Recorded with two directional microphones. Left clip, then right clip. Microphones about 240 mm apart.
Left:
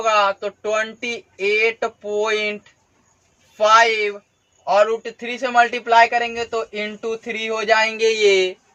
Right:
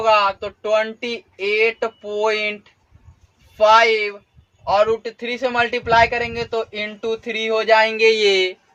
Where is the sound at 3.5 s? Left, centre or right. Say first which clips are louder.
Right 1 dB; centre.